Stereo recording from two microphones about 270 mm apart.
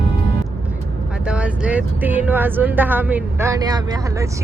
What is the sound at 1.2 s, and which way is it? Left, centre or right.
Speech, centre.